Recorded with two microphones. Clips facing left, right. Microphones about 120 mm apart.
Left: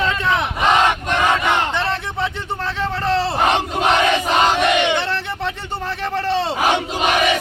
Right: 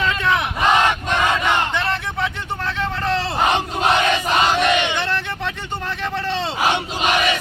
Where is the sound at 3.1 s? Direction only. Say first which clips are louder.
Left 5 dB; 30° left (ahead or behind).